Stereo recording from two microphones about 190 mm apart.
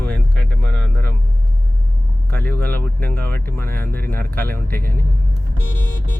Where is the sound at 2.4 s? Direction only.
55° right (ahead or behind).